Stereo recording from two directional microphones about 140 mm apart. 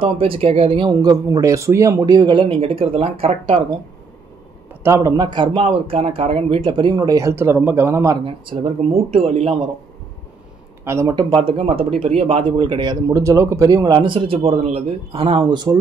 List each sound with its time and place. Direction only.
0.0 s speech: 40° right (ahead or behind)
4.8 s speech: 20° right (ahead or behind)
8.5 s speech: 45° right (ahead or behind)
10.9 s speech: 20° right (ahead or behind)
11.1 s speech: 35° right (ahead or behind)